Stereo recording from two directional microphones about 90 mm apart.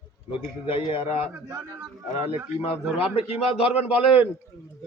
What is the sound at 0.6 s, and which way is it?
Speech, 90° left.